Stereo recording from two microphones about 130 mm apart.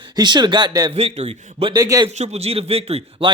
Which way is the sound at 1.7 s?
30° right (ahead or behind).